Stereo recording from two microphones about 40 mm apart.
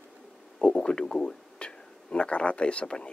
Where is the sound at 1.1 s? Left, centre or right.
Centre.